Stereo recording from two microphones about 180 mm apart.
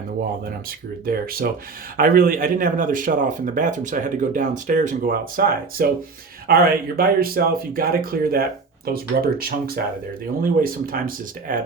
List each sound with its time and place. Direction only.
1.0 s speech: 55° right (ahead or behind)